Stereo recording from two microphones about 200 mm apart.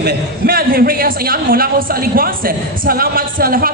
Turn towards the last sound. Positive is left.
turn(degrees=-45)  # may be behind; listen again after turning